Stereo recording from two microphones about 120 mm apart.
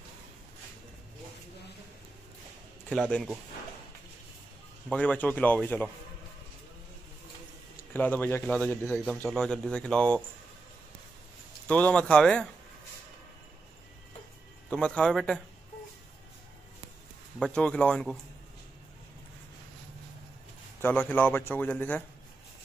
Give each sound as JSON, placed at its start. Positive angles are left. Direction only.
{"t": 2.9, "sound": "a man's voice", "side_deg": 10}
{"t": 4.8, "sound": "a man's voice", "side_deg": 10}
{"t": 7.9, "sound": "a man's voice", "side_deg": 15}
{"t": 11.6, "sound": "a man's voice", "side_deg": 10}
{"t": 14.7, "sound": "a man's voice", "side_deg": 10}
{"t": 17.6, "sound": "a man's voice", "side_deg": 10}
{"t": 20.8, "sound": "a man's voice", "side_deg": 15}